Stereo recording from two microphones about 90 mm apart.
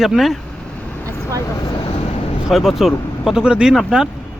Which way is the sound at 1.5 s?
65° left (ahead or behind).